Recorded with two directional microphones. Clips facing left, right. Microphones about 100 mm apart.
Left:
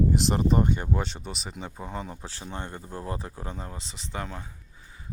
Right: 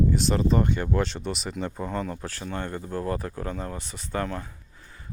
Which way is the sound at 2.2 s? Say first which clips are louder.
Right 5 dB; 25° left (ahead or behind).